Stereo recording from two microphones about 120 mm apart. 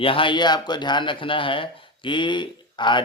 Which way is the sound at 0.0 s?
45° left (ahead or behind).